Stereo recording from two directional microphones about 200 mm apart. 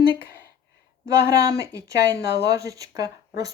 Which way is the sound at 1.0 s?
15° right (ahead or behind).